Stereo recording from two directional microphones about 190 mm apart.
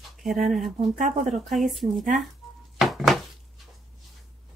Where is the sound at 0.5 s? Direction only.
Centre (ahead or behind).